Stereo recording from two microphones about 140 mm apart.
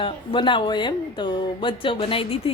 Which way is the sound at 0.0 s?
35° left (ahead or behind).